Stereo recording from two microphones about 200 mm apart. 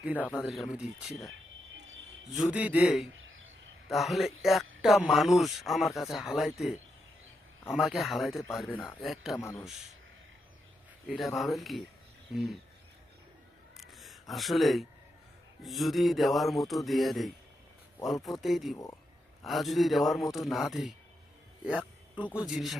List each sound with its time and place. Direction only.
0.0 s speech: 5° right (ahead or behind)
2.3 s speech: 5° right (ahead or behind)
3.2 s a sound: 75° right (ahead or behind)
3.8 s speech: centre (ahead or behind)
9.4 s speech: 15° left (ahead or behind)
11.3 s speech: centre (ahead or behind)
13.7 s a sound: centre (ahead or behind)
15.6 s speech: centre (ahead or behind)
22.4 s speech: centre (ahead or behind)